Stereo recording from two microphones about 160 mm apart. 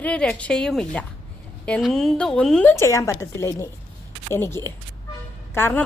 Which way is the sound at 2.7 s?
20° left (ahead or behind).